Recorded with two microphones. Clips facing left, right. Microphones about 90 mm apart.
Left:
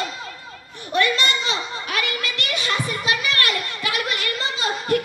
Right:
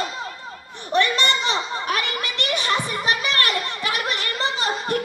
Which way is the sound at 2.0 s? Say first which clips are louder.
Right 1 dB; 25° right (ahead or behind).